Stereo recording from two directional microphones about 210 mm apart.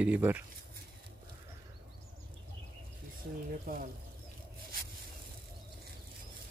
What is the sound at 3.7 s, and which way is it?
Speech, 45° right (ahead or behind).